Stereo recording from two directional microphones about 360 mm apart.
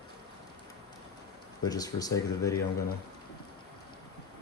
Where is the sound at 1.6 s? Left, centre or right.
Centre.